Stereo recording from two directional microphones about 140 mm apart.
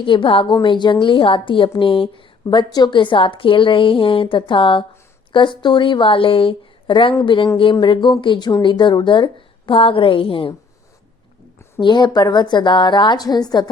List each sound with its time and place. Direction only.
0.0 s a woman's voice: 35° left (ahead or behind)
11.8 s a woman's voice: 35° left (ahead or behind)